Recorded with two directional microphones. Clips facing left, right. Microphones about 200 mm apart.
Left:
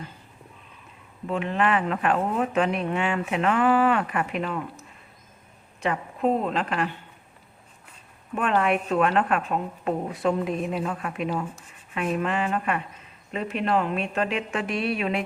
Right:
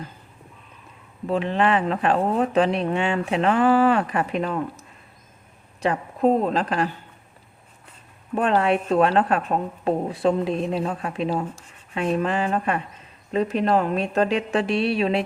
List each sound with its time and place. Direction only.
1.3 s speech: 30° right (ahead or behind)
5.8 s speech: 35° right (ahead or behind)
8.4 s speech: 35° right (ahead or behind)